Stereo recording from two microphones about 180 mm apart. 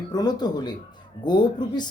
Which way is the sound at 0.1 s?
20° left (ahead or behind).